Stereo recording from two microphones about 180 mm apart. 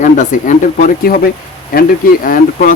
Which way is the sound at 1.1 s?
55° left (ahead or behind).